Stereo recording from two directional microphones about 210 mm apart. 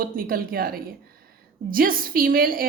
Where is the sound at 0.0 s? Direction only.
45° right (ahead or behind).